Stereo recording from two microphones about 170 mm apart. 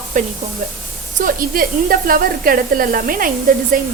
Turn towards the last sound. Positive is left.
turn(degrees=-55)  # may be behind; listen again after turning